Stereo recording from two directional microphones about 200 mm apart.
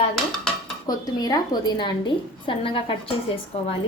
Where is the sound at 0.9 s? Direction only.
20° left (ahead or behind).